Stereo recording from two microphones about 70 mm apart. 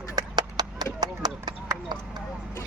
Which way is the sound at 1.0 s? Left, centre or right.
Right.